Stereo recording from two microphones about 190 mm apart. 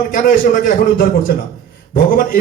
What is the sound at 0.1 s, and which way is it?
A man's voice, 45° left (ahead or behind).